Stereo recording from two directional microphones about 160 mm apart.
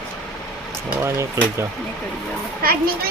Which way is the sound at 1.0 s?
15° right (ahead or behind).